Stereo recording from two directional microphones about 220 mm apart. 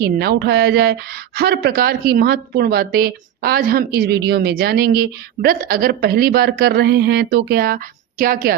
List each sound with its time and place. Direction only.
0.0 s a woman's voice: 45° right (ahead or behind)